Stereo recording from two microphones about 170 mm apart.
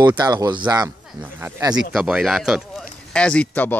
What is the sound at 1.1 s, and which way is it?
Speech, 10° right (ahead or behind).